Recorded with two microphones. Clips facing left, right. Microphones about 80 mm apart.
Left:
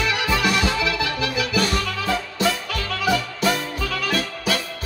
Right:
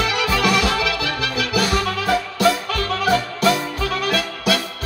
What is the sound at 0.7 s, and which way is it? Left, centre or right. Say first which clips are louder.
Music: right 1 dB; left.